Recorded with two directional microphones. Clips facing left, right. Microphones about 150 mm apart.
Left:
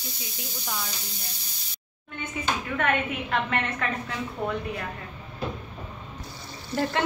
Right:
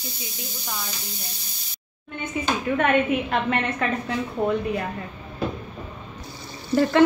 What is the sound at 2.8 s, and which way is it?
A woman's voice, 20° right (ahead or behind).